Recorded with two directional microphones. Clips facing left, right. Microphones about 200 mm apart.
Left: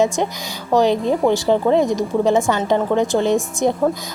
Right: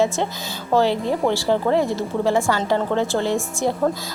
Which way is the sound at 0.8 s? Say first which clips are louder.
Left 4 dB; 15° left (ahead or behind).